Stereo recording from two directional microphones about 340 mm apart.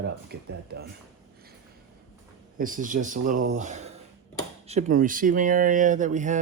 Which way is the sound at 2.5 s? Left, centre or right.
Right.